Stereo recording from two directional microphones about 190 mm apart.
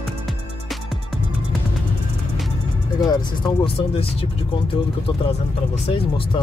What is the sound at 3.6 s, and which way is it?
Speech, 30° left (ahead or behind).